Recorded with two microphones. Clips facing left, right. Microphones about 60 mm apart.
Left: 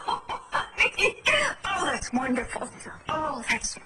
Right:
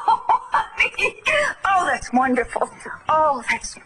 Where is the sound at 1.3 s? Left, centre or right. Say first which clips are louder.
Right 7 dB; right.